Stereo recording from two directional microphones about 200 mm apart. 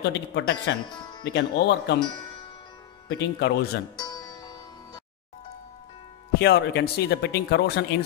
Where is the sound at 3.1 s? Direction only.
60° left (ahead or behind).